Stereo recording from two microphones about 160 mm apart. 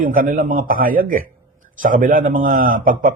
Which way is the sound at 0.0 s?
60° right (ahead or behind).